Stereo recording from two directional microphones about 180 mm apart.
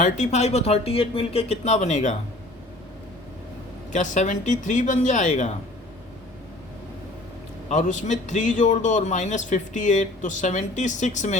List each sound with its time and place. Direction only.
0.0 s speech: 40° left (ahead or behind)
3.9 s a man's voice: 45° left (ahead or behind)
7.7 s a man's voice: 45° left (ahead or behind)